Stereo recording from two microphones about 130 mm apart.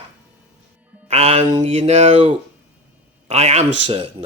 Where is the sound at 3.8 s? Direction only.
45° right (ahead or behind).